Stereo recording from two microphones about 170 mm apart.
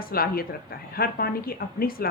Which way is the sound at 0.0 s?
60° left (ahead or behind).